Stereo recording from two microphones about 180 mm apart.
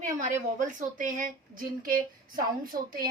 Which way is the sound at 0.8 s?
50° right (ahead or behind).